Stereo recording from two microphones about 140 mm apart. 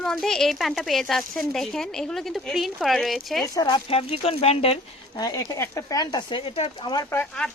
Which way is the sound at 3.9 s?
45° left (ahead or behind).